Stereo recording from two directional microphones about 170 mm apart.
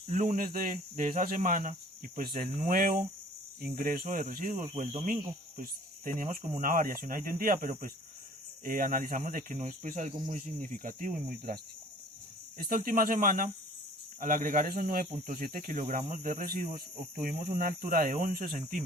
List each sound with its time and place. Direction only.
0.1 s speech: 55° right (ahead or behind)
12.5 s speech: 55° right (ahead or behind)